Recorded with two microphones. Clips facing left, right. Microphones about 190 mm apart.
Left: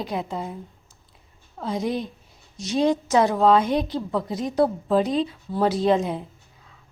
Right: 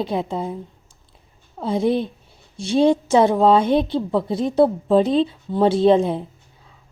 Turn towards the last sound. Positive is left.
turn(degrees=-30)  # may be behind; listen again after turning